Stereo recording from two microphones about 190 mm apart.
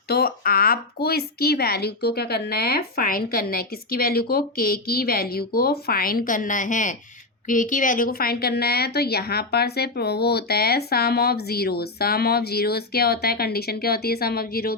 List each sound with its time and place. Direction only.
0.1 s a woman's voice: 55° left (ahead or behind)